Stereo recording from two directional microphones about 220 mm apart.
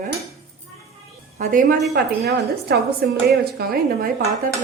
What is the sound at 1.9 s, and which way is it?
A woman's voice, 45° right (ahead or behind).